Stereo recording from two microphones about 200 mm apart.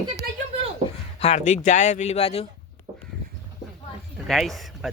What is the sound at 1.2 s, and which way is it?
Speech, 35° left (ahead or behind).